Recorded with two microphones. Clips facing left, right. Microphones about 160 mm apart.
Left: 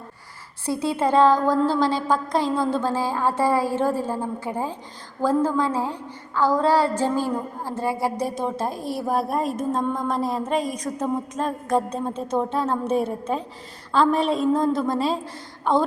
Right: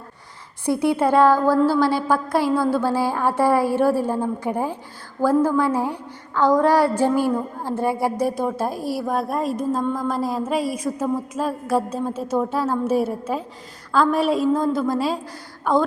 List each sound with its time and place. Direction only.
0.6 s a woman's voice: 15° right (ahead or behind)
8.0 s speech: 15° left (ahead or behind)
8.5 s a woman's voice: 5° right (ahead or behind)